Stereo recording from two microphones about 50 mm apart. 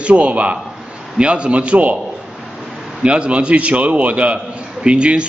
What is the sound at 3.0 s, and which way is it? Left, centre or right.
A man's voice, right.